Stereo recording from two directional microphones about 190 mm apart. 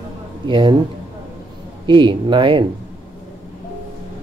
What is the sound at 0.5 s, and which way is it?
Speech, 25° right (ahead or behind).